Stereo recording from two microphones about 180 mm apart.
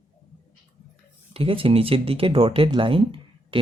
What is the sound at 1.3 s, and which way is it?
Speech, 30° right (ahead or behind).